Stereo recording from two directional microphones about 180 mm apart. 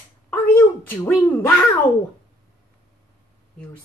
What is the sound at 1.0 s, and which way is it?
Speech, 10° left (ahead or behind).